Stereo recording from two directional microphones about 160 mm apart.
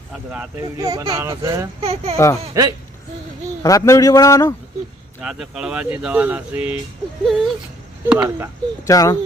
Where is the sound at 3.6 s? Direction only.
20° left (ahead or behind).